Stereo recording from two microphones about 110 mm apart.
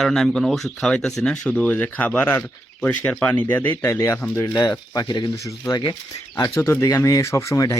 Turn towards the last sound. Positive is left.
turn(degrees=30)  # may be behind; listen again after turning